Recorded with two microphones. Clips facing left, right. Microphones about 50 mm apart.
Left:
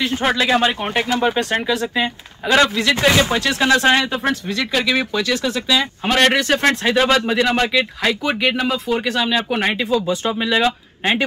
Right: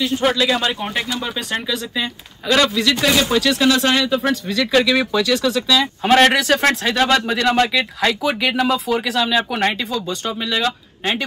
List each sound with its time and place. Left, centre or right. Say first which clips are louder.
0.3 s speech: left 2 dB; left
1.5 s speech: left 4 dB; centre
2.0 s speech: left 3 dB; left
4.2 s speech: right 1 dB; centre
6.0 s speech: right 3 dB; centre